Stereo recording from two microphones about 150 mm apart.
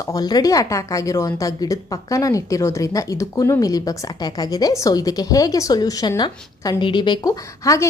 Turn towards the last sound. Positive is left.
turn(degrees=20)  # may be behind; listen again after turning